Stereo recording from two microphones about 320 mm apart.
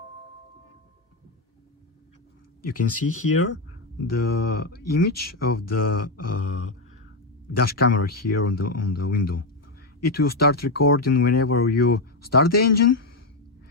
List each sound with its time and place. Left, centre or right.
2.6 s speech: left
4.0 s speech: left
7.8 s speech: left